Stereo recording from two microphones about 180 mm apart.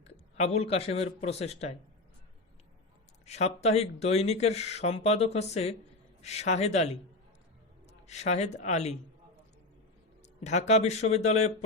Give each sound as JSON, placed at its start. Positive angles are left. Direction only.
{"t": 0.0, "sound": "speech", "side_deg": 35}
{"t": 3.2, "sound": "a man's voice", "side_deg": 35}
{"t": 10.4, "sound": "speech", "side_deg": 40}